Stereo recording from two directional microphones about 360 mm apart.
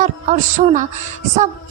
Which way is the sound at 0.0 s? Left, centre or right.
Right.